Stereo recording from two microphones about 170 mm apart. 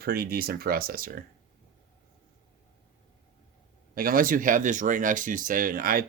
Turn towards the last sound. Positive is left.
turn(degrees=-55)  # may be behind; listen again after turning